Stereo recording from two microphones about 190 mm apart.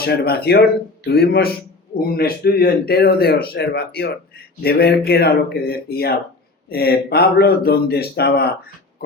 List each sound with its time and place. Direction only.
0.0 s speech: 55° left (ahead or behind)